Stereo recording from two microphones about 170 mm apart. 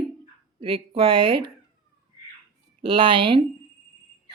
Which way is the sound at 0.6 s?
30° right (ahead or behind).